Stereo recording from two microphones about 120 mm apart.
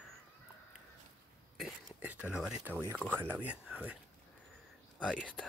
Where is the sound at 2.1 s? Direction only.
10° right (ahead or behind).